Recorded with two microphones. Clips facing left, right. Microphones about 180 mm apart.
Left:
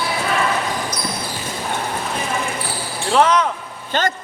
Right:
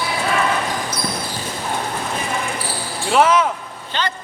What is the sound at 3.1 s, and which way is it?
Speech, 5° right (ahead or behind).